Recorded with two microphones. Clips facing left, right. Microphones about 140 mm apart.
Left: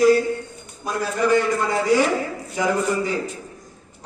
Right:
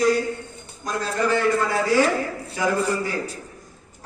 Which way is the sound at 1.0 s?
15° left (ahead or behind).